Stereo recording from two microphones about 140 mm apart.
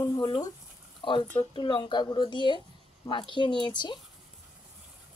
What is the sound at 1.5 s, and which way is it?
Speech, 35° left (ahead or behind).